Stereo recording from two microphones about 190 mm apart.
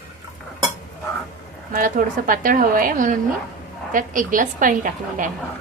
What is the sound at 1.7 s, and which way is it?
A woman's voice, 45° right (ahead or behind).